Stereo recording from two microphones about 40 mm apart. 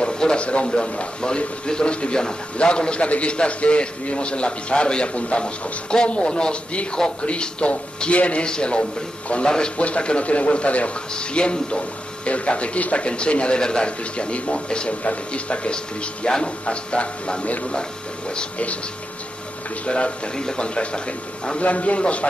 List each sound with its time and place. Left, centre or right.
0.0 s a man's voice: left
19.9 s a man's voice: left